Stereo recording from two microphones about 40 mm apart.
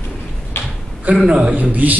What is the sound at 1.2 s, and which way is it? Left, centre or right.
Speech, right.